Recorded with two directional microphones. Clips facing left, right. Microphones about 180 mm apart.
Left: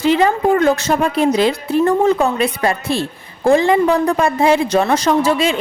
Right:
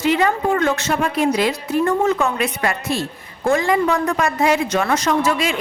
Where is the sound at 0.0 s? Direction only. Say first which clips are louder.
Left 4 dB; 30° left (ahead or behind).